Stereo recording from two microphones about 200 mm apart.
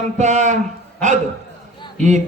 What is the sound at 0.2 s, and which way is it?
Speech, 35° right (ahead or behind).